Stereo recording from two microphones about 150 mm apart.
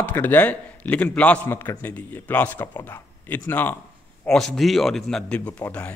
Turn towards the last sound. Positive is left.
turn(degrees=10)  # may be behind; listen again after turning